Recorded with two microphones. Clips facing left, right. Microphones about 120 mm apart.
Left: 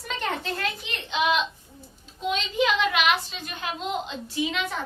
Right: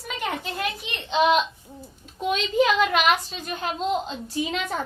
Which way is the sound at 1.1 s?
35° right (ahead or behind).